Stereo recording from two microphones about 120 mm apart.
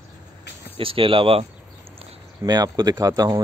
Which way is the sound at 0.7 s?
50° right (ahead or behind).